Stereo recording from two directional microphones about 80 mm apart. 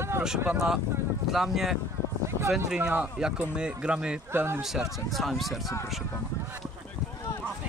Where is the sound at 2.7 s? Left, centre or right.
Centre.